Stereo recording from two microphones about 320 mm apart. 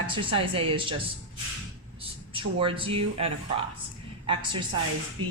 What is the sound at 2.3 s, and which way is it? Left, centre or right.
Speech, centre.